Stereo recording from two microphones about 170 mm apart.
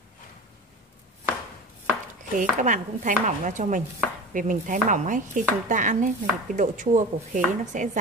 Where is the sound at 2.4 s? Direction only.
50° right (ahead or behind).